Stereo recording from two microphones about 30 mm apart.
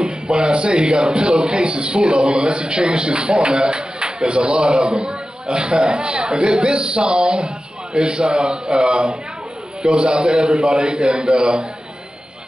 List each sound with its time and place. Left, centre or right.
0.0 s speech: right